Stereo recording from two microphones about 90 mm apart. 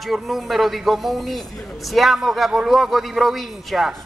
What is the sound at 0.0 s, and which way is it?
A man's voice, centre (ahead or behind).